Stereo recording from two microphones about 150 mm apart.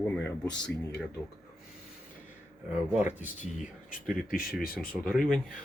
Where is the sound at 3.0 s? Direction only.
10° right (ahead or behind).